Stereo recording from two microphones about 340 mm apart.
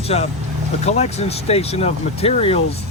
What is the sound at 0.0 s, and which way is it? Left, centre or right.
Speech, centre.